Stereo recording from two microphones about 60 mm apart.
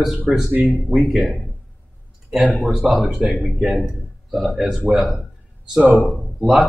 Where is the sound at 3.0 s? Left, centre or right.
Centre.